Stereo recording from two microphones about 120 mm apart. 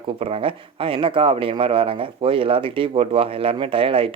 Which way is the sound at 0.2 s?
55° right (ahead or behind).